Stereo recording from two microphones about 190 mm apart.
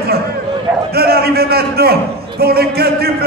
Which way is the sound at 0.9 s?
55° right (ahead or behind).